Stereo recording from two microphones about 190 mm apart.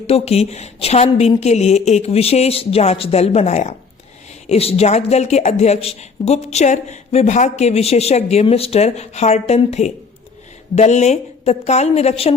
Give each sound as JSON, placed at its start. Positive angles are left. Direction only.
{"t": 0.1, "sound": "speech", "side_deg": 35}